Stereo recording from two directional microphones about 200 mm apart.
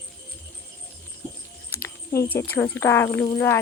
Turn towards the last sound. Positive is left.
turn(degrees=10)  # may be behind; listen again after turning